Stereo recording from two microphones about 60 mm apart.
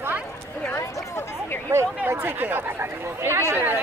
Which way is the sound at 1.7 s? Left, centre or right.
Right.